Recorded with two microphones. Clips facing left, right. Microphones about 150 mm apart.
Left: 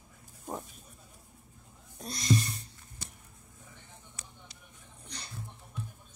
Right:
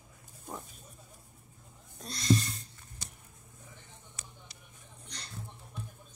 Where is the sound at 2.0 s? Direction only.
10° left (ahead or behind).